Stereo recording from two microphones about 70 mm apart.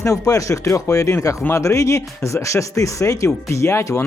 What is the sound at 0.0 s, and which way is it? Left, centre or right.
Speech, left.